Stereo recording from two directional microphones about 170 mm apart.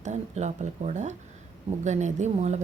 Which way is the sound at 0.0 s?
45° right (ahead or behind).